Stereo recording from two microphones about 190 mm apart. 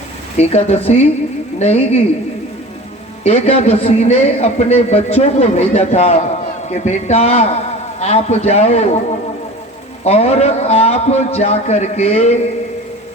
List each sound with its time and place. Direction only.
0.3 s a man's voice: 35° left (ahead or behind)
3.2 s a man's voice: 35° left (ahead or behind)